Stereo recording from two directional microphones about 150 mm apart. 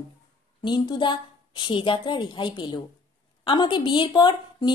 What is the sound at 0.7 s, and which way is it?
A woman's voice, 30° left (ahead or behind).